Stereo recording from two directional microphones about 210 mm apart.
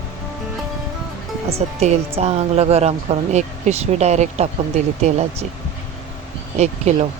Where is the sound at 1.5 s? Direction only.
30° right (ahead or behind).